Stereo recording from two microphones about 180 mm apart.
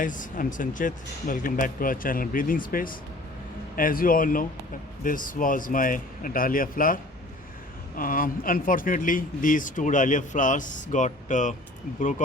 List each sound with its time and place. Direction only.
0.0 s speech: 45° left (ahead or behind)